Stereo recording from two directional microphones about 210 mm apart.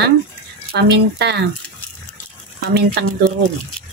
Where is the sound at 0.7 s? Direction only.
55° right (ahead or behind).